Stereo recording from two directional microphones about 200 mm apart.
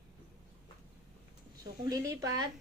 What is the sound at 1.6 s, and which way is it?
Speech, 20° right (ahead or behind).